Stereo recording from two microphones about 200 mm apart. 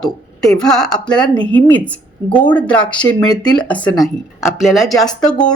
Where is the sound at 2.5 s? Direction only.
5° left (ahead or behind).